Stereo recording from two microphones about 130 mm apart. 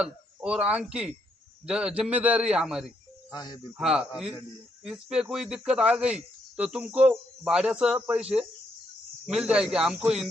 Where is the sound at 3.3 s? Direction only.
30° left (ahead or behind).